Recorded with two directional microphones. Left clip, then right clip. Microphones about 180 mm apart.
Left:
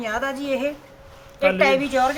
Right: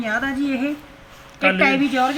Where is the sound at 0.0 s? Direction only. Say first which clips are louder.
Right 3 dB; 60° left (ahead or behind).